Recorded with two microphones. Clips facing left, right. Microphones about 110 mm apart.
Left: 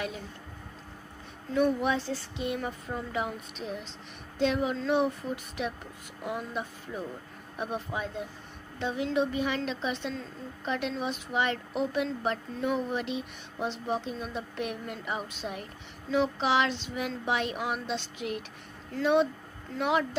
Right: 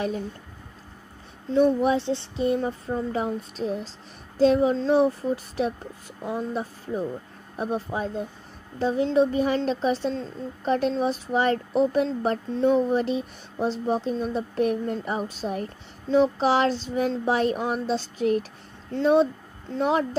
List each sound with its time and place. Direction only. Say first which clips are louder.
1.5 s a woman's voice: right 6 dB; 30° right (ahead or behind)